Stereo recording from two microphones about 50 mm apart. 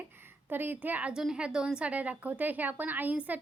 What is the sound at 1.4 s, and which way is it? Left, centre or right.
Speech, centre.